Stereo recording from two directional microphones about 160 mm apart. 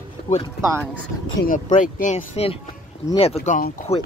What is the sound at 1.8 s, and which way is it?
Speech, 55° left (ahead or behind).